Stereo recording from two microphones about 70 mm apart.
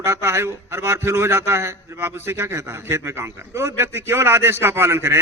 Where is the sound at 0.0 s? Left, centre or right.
Right.